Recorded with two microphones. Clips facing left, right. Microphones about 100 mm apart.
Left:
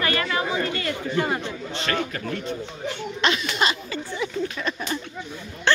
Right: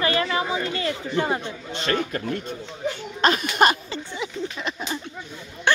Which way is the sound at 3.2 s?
45° right (ahead or behind).